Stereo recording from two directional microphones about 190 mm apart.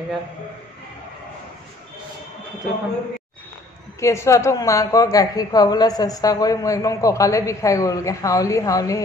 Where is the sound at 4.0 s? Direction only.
15° left (ahead or behind).